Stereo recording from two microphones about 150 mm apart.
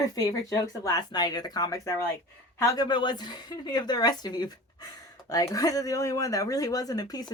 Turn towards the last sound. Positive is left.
turn(degrees=25)  # may be behind; listen again after turning